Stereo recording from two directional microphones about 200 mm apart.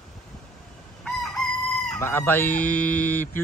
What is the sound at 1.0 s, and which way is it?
Chicken, centre (ahead or behind).